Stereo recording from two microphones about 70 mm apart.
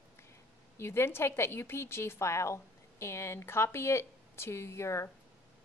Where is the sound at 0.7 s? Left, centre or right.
Left.